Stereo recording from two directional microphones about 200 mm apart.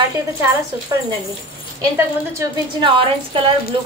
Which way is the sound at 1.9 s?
15° right (ahead or behind).